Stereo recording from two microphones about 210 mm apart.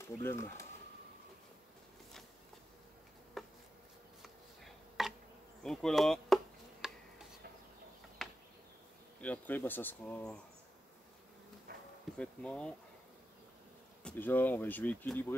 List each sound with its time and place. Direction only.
0.0 s speech: 10° left (ahead or behind)
3.4 s a sound: centre (ahead or behind)
5.6 s insect: centre (ahead or behind)
9.2 s speech: 10° left (ahead or behind)
11.7 s bee: 50° right (ahead or behind)
12.2 s speech: 5° left (ahead or behind)
14.0 s speech: 10° left (ahead or behind)